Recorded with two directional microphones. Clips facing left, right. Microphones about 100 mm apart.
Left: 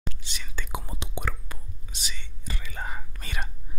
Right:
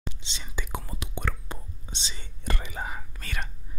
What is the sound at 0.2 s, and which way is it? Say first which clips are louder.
Speech: right 1 dB; 25° right (ahead or behind).